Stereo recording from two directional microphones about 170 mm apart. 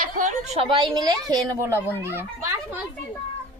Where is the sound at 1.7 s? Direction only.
10° left (ahead or behind).